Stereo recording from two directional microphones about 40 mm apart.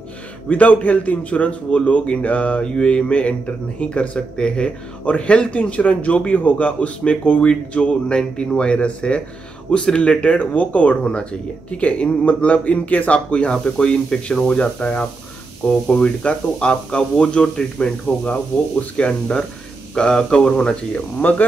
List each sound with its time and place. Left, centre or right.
0.5 s a man's voice: left
10.4 s a man's voice: left
13.5 s speech: centre
21.2 s speech: left